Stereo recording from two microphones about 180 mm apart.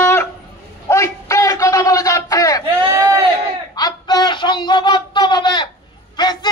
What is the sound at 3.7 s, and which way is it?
Speech, 20° left (ahead or behind).